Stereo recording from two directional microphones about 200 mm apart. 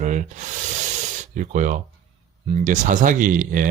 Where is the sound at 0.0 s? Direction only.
35° right (ahead or behind).